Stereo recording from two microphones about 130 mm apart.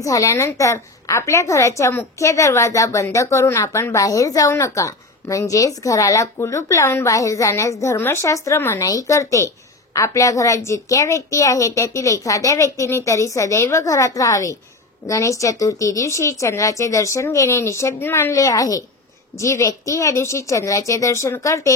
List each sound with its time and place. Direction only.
0.0 s a woman's voice: 25° left (ahead or behind)